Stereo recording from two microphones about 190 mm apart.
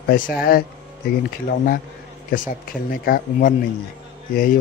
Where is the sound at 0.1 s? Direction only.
50° left (ahead or behind).